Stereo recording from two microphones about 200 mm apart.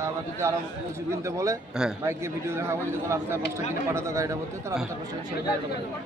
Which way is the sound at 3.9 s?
15° right (ahead or behind).